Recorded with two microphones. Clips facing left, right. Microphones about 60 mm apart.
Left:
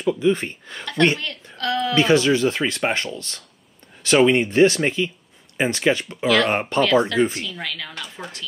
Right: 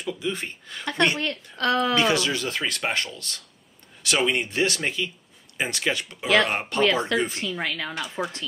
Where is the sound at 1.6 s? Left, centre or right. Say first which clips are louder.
Even; right.